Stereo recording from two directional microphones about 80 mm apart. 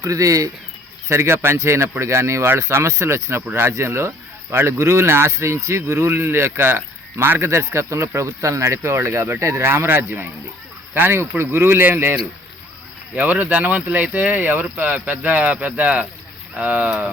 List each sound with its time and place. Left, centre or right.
0.0 s speech: right
1.0 s speech: right
13.1 s speech: right